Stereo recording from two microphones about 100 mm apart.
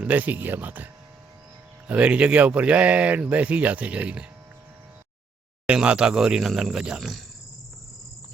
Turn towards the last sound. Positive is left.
turn(degrees=-5)  # may be behind; listen again after turning